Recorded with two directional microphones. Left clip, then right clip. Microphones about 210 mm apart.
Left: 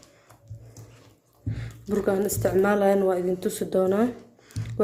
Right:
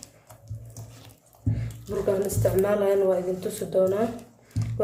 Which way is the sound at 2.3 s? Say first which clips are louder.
Left 1 dB; 50° left (ahead or behind).